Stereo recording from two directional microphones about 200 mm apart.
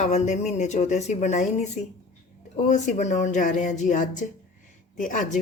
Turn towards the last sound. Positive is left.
turn(degrees=40)  # may be behind; listen again after turning